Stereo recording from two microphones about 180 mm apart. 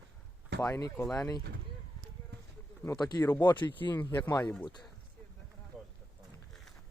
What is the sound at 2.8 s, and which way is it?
Speech, 20° left (ahead or behind).